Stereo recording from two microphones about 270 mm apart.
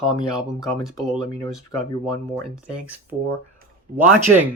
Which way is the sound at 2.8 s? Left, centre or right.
Centre.